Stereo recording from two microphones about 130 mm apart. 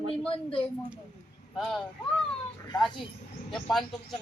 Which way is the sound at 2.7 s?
35° left (ahead or behind).